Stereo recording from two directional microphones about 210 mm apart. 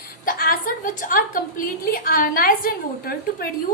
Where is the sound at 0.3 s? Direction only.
40° left (ahead or behind).